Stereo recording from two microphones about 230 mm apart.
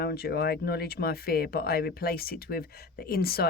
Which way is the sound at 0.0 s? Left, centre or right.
Left.